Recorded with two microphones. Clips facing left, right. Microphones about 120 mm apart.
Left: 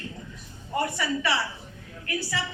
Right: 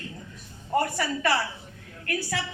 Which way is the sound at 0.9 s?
50° right (ahead or behind).